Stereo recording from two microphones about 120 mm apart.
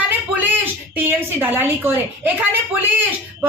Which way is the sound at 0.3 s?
15° right (ahead or behind).